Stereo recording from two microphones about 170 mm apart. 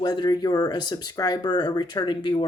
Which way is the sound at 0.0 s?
25° left (ahead or behind).